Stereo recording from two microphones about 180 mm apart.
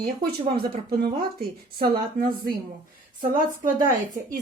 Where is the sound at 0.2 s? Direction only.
60° right (ahead or behind).